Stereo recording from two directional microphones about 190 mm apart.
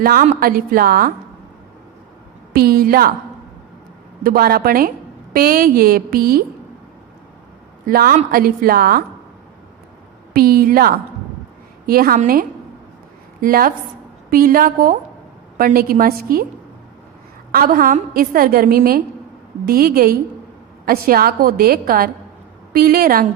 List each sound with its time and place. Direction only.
0.0 s a woman's voice: 50° right (ahead or behind)
2.6 s a woman's voice: 55° right (ahead or behind)
4.2 s a woman's voice: 50° right (ahead or behind)
7.9 s a woman's voice: 50° right (ahead or behind)
10.3 s a woman's voice: 50° right (ahead or behind)
17.5 s a woman's voice: 50° right (ahead or behind)